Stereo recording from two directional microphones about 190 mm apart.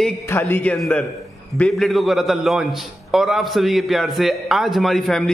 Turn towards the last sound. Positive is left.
turn(degrees=0)  # may be behind; listen again after turning